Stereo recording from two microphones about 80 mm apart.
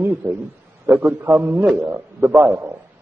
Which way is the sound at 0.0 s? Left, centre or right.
Right.